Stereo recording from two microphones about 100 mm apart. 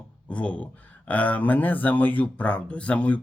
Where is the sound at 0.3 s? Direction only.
10° left (ahead or behind).